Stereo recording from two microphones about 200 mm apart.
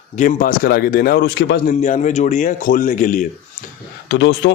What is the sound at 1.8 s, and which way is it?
A man's voice, 35° left (ahead or behind).